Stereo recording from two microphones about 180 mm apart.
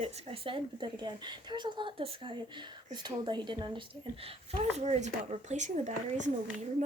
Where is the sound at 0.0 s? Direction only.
30° right (ahead or behind).